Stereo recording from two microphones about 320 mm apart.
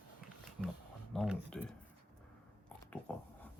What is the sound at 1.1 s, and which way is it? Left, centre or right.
Speech, centre.